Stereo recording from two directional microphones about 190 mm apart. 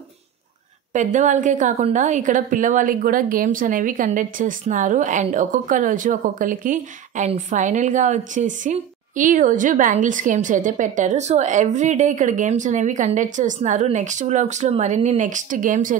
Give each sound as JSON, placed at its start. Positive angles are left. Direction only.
{"t": 0.9, "sound": "a woman's voice", "side_deg": -40}